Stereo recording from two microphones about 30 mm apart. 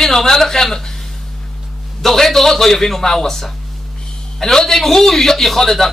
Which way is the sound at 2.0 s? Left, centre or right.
Centre.